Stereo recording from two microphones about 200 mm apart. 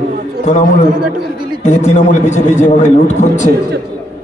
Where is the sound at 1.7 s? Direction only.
35° left (ahead or behind).